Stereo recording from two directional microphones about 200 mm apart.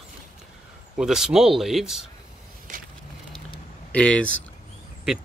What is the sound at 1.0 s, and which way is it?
Speech, centre (ahead or behind).